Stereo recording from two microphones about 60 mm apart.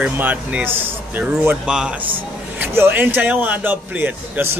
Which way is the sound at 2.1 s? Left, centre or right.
Right.